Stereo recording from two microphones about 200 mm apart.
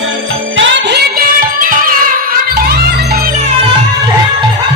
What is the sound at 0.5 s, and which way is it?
Music, 65° right (ahead or behind).